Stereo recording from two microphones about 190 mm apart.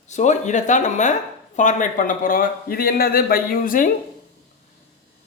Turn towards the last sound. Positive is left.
turn(degrees=45)  # may be behind; listen again after turning